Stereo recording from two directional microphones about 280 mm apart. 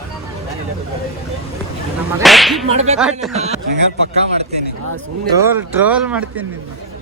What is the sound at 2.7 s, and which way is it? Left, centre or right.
Speech, right.